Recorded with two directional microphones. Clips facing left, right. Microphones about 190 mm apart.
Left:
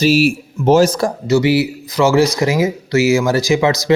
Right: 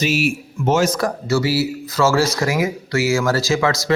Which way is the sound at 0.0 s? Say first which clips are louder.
Left 6 dB; 35° left (ahead or behind).